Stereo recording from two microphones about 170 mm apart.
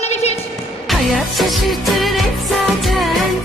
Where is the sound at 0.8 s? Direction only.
Centre (ahead or behind).